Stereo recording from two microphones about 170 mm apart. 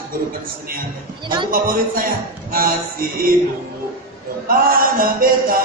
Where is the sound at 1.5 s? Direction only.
55° right (ahead or behind).